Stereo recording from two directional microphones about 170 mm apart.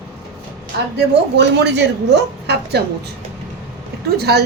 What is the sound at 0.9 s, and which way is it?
A woman's voice, 90° right.